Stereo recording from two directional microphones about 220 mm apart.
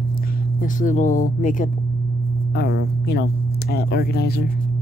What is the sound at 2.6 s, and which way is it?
Speech, 50° left (ahead or behind).